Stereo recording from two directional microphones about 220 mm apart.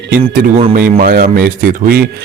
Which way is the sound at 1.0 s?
40° right (ahead or behind).